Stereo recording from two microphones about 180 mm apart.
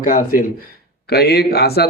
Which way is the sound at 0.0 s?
50° left (ahead or behind).